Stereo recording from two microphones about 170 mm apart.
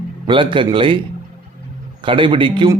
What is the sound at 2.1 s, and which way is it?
Speech, 30° right (ahead or behind).